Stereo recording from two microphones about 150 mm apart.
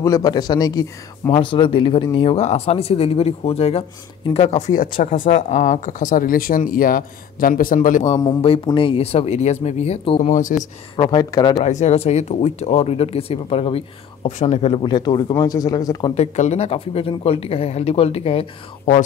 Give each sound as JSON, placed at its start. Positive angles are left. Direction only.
{"t": 0.0, "sound": "speech", "side_deg": 25}
{"t": 8.6, "sound": "speech", "side_deg": 35}
{"t": 10.3, "sound": "speech", "side_deg": 60}
{"t": 11.0, "sound": "speech", "side_deg": 30}
{"t": 11.6, "sound": "speech", "side_deg": 50}
{"t": 16.2, "sound": "speech", "side_deg": 45}